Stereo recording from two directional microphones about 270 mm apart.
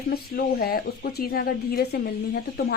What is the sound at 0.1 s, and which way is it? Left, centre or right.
A woman's voice, left.